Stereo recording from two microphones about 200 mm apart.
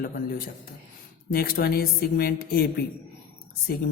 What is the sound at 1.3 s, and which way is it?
Speech, 50° left (ahead or behind).